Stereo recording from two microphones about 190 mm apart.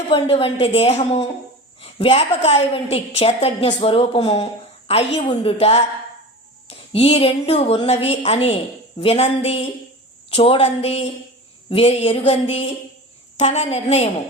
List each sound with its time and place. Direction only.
0.1 s a woman's voice: 30° left (ahead or behind)